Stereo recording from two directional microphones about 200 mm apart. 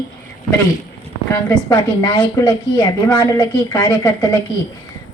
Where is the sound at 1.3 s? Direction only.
15° left (ahead or behind).